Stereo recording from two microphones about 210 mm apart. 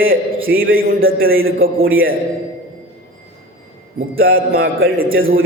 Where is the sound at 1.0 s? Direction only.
70° right (ahead or behind).